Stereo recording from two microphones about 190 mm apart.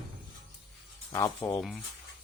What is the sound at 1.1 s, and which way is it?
Speech, 15° left (ahead or behind).